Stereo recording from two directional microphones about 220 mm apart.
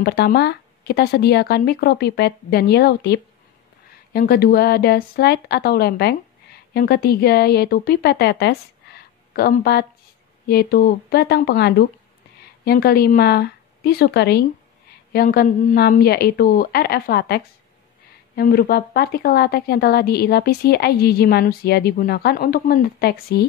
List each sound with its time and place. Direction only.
0.0 s a woman's voice: 45° left (ahead or behind)